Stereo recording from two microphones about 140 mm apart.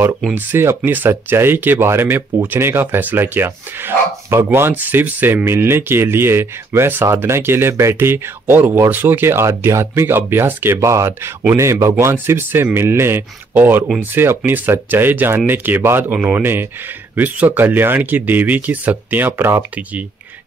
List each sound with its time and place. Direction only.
0.5 s speech: 15° right (ahead or behind)